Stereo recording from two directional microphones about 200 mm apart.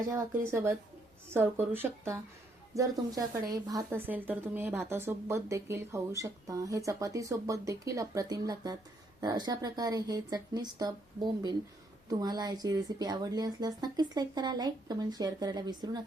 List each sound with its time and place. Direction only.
0.1 s speech: 15° right (ahead or behind)